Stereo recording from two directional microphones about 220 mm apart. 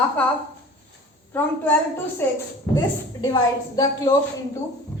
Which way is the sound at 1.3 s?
10° left (ahead or behind).